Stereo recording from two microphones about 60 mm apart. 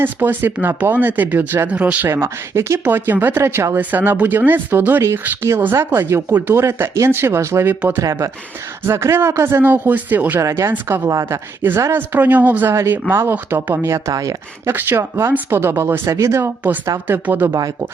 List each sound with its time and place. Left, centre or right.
0.0 s speech: right
2.2 s speech: right
2.8 s speech: right
3.8 s speech: right
5.4 s speech: right
8.9 s speech: right
9.6 s speech: right
11.1 s a woman's voice: right
11.6 s speech: right
13.8 s speech: right
14.7 s speech: right
17.2 s speech: right